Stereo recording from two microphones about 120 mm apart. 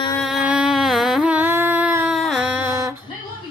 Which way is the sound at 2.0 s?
Centre (ahead or behind).